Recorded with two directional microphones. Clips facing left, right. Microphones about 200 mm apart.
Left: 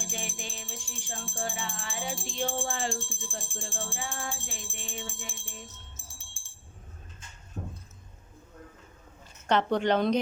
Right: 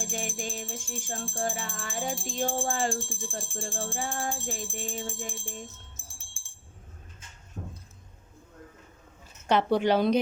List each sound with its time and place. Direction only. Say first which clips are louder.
0.0 s music: right 5 dB; 45° right (ahead or behind)
9.5 s speech: right 2 dB; 10° right (ahead or behind)